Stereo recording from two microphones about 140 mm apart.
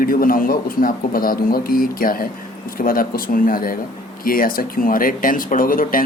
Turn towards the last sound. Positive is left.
turn(degrees=85)